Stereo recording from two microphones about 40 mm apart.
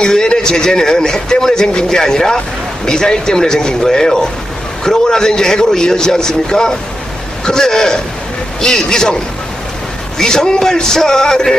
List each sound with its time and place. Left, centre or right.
0.0 s a man's voice: centre